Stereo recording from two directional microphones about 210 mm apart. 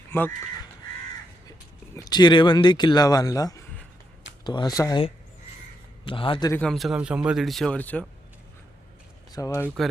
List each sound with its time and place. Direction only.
0.1 s speech: 10° left (ahead or behind)
2.0 s speech: 20° left (ahead or behind)
6.1 s speech: 25° left (ahead or behind)
6.5 s a man's voice: 5° left (ahead or behind)
9.3 s speech: 15° left (ahead or behind)